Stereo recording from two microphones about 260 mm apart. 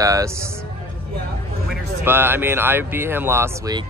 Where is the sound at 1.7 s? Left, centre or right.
Centre.